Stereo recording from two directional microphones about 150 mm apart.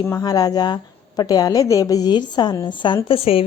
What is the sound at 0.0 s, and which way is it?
A woman's voice, 25° left (ahead or behind).